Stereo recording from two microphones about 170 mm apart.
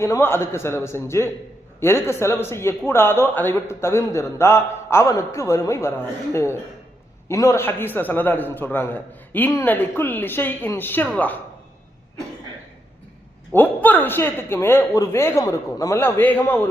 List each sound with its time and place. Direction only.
0.0 s a man's voice: 15° left (ahead or behind)
13.5 s a man's voice: 10° left (ahead or behind)